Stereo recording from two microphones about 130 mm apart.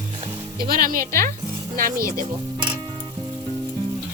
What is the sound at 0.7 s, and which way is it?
Speech, 90° right.